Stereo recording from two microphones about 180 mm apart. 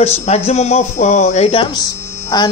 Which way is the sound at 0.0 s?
35° left (ahead or behind).